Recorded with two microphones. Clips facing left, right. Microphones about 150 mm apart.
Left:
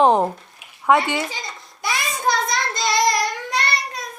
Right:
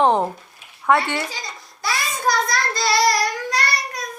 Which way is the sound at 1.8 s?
20° left (ahead or behind).